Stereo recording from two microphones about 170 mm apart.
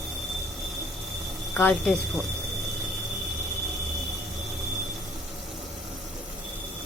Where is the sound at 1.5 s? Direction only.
10° left (ahead or behind).